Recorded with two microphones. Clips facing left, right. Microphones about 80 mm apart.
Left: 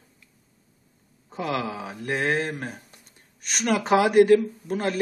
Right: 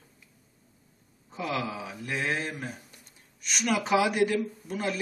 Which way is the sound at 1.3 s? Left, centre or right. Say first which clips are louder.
Left 4 dB; left.